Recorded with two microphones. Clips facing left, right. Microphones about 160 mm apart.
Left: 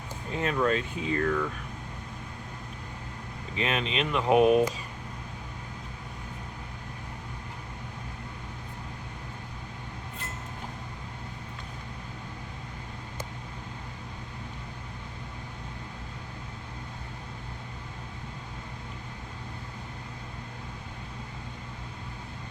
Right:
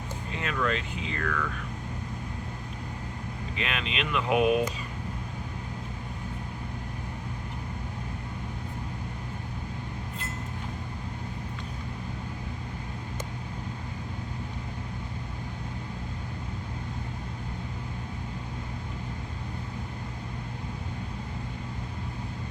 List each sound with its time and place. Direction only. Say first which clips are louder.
0.3 s speech: left 4 dB; 35° left (ahead or behind)
3.6 s speech: left 4 dB; 35° left (ahead or behind)